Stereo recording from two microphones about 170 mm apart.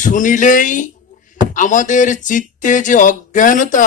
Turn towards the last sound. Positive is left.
turn(degrees=50)  # may be behind; listen again after turning